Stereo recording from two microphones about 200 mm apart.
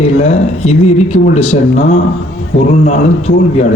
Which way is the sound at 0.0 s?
30° left (ahead or behind).